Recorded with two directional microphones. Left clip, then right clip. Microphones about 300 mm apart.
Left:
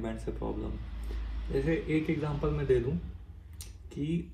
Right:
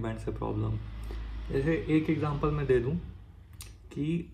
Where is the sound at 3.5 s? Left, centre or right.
Centre.